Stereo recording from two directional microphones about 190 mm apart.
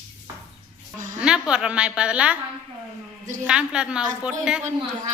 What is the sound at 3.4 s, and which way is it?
A man's voice, 5° right (ahead or behind).